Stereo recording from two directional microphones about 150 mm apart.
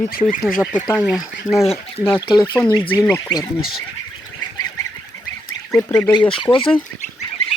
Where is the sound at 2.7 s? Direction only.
35° left (ahead or behind).